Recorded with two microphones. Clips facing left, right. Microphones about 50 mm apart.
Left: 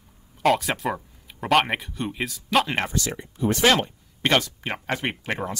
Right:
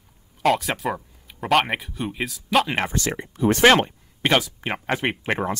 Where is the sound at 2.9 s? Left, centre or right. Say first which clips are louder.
Right 2 dB; right.